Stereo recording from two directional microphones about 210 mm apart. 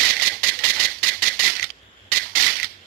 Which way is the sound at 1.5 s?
45° right (ahead or behind).